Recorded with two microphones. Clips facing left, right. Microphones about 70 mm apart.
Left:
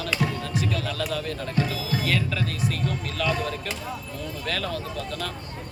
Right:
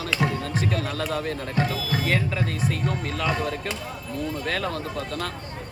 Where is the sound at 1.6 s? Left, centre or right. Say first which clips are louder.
Right 1 dB; right.